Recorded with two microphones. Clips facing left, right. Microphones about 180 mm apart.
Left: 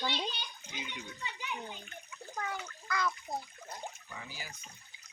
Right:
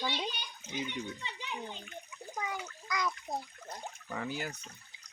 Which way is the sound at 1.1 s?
25° right (ahead or behind).